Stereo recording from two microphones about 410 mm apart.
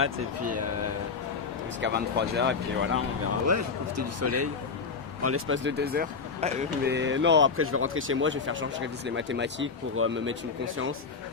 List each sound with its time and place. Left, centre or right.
0.0 s speech: right
1.8 s speech: right
3.4 s speech: right